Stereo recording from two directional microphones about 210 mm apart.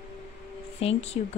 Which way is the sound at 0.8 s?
30° left (ahead or behind).